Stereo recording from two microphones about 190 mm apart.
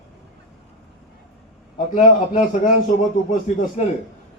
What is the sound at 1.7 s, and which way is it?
Speech, 40° left (ahead or behind).